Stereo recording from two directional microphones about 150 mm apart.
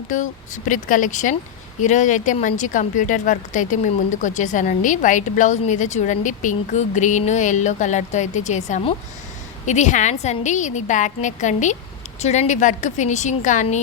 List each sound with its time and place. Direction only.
0.1 s a woman's voice: 60° left (ahead or behind)